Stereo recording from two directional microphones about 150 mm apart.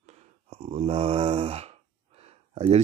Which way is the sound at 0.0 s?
45° right (ahead or behind).